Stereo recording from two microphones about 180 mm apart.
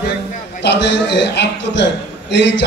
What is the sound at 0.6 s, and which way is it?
A man's voice, 75° left (ahead or behind).